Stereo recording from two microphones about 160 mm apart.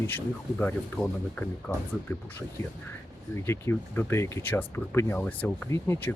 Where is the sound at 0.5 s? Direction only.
10° left (ahead or behind).